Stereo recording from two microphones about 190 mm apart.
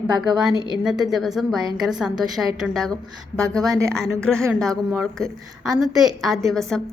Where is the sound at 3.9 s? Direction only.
5° left (ahead or behind).